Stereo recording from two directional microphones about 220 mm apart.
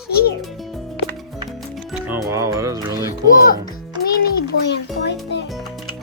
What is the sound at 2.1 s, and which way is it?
Speech, 15° right (ahead or behind).